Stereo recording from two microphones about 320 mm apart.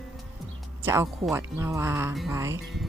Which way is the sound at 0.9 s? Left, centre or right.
Centre.